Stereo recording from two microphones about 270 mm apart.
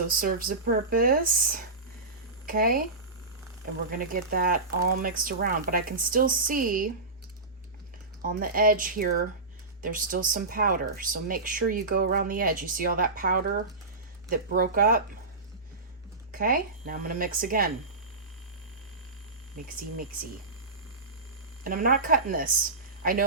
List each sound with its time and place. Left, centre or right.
0.1 s speech: right
3.8 s speech: right
8.4 s speech: right
16.3 s speech: right
21.6 s speech: right